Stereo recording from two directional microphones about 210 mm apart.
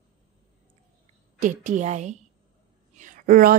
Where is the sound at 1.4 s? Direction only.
35° right (ahead or behind).